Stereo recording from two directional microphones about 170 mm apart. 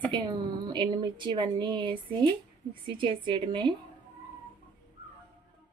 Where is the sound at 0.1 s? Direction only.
25° right (ahead or behind).